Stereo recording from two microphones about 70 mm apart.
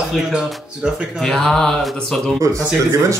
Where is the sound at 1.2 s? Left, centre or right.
Centre.